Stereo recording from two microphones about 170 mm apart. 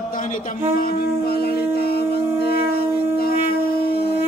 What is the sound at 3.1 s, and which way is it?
Shofar, 65° left (ahead or behind).